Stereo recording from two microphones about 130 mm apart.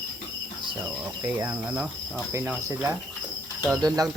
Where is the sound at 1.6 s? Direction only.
15° right (ahead or behind).